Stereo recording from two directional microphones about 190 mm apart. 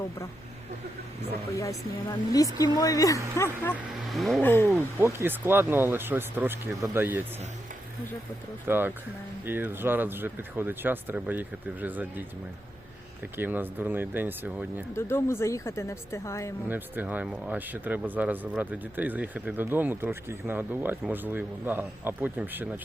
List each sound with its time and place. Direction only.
1.5 s speech: 15° left (ahead or behind)
4.1 s a sound: centre (ahead or behind)
4.9 s speech: 15° right (ahead or behind)
8.6 s speech: 10° right (ahead or behind)
13.3 s speech: 10° right (ahead or behind)
14.9 s speech: 15° left (ahead or behind)
16.6 s speech: 10° right (ahead or behind)